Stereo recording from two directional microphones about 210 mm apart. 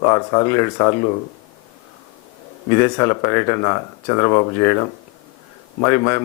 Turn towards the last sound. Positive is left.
turn(degrees=15)  # may be behind; listen again after turning